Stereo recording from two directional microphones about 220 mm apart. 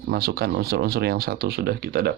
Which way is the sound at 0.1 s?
45° right (ahead or behind).